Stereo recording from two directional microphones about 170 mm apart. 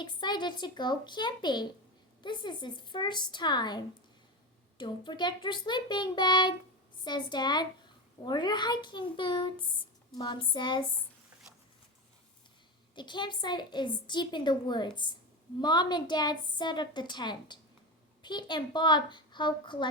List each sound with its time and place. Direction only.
0.0 s a woman's voice: 25° left (ahead or behind)
13.0 s a woman's voice: 25° left (ahead or behind)